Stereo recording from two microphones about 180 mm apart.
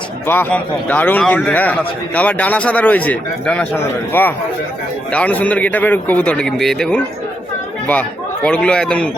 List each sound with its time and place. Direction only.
0.3 s a man's voice: 10° left (ahead or behind)